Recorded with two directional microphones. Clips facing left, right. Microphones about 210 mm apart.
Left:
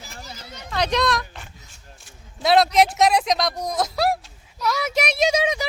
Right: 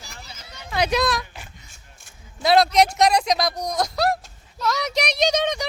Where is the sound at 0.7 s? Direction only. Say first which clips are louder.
Even; 5° right (ahead or behind).